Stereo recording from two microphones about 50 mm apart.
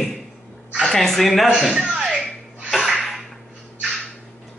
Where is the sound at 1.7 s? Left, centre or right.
Centre.